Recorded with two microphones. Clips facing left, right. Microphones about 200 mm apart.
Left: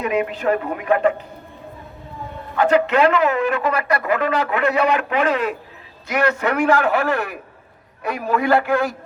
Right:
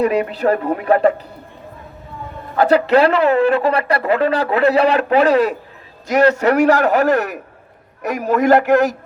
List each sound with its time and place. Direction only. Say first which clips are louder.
0.0 s speech: right 4 dB; 35° right (ahead or behind)
2.6 s a man's voice: right 3 dB; 35° right (ahead or behind)